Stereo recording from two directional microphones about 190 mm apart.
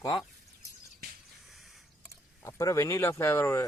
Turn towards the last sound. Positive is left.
turn(degrees=15)  # may be behind; listen again after turning